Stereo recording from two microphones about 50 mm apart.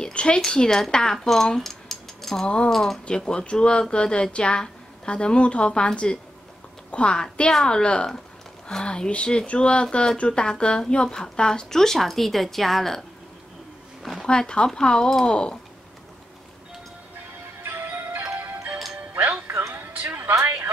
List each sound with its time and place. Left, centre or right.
0.0 s speech: centre
2.4 s a woman's voice: centre
2.7 s speech: centre
3.1 s a woman's voice: centre
14.2 s speech: centre
17.6 s music: right
19.7 s music: right